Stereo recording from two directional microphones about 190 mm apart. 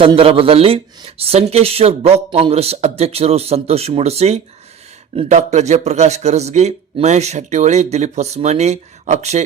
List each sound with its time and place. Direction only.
0.0 s a man's voice: 30° right (ahead or behind)